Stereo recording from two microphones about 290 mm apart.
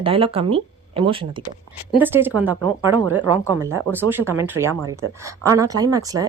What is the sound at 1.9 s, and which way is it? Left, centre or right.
A woman's voice, centre.